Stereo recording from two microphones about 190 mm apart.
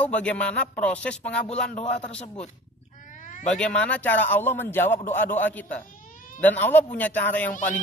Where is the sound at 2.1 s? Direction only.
35° left (ahead or behind).